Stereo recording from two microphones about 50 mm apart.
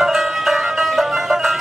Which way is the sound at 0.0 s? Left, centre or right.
Centre.